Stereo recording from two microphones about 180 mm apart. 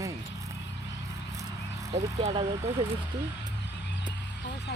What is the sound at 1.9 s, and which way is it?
Speech, 30° right (ahead or behind).